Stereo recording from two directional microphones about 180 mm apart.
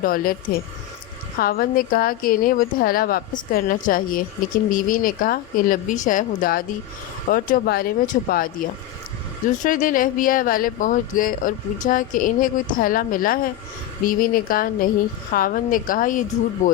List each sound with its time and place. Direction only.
0.0 s speech: 50° left (ahead or behind)
1.4 s speech: 55° left (ahead or behind)
9.6 s speech: 50° left (ahead or behind)